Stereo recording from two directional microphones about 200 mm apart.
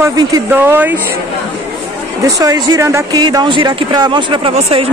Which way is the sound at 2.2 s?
15° right (ahead or behind).